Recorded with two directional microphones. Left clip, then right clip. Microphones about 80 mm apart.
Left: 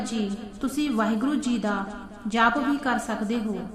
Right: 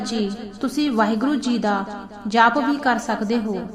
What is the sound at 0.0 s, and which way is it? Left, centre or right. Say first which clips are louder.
A woman's voice: right 5 dB; centre.